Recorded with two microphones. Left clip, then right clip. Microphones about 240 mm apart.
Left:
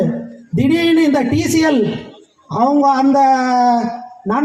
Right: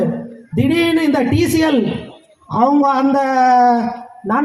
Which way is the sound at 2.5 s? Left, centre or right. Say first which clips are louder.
Even; right.